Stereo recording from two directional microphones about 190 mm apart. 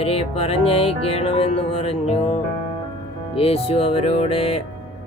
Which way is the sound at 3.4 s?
30° left (ahead or behind).